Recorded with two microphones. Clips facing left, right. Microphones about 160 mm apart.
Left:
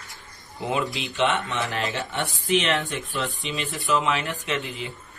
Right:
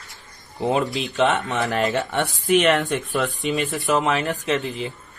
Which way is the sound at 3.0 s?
50° right (ahead or behind).